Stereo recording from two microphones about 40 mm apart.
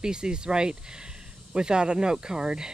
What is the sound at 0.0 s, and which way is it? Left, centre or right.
Speech, right.